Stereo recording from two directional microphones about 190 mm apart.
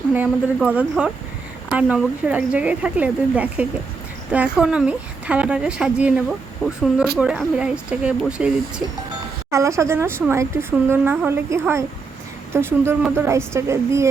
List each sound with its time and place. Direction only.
0.1 s a woman's voice: 10° right (ahead or behind)
9.5 s speech: 15° right (ahead or behind)